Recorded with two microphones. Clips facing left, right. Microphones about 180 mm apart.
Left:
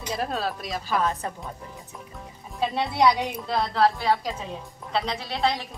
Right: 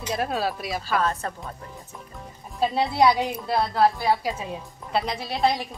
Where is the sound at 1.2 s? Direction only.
10° left (ahead or behind).